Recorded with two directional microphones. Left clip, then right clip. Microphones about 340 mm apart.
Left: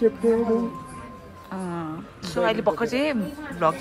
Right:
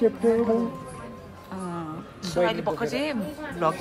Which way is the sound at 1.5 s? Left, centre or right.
Centre.